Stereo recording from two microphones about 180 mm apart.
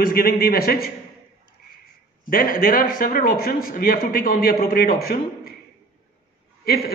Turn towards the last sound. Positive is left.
turn(degrees=60)  # may be behind; listen again after turning